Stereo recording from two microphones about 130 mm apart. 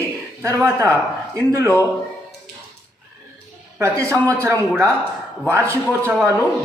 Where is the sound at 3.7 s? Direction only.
20° right (ahead or behind).